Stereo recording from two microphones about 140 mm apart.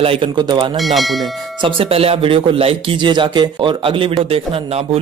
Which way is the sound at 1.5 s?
40° right (ahead or behind).